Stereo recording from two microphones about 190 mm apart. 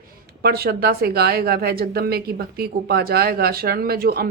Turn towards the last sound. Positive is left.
turn(degrees=-55)  # may be behind; listen again after turning